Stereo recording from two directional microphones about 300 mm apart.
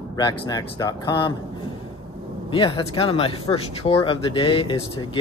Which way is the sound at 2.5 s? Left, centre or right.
Centre.